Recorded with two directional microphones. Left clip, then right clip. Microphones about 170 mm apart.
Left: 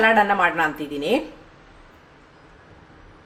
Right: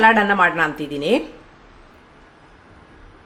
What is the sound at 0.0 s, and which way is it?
A woman's voice, 25° right (ahead or behind).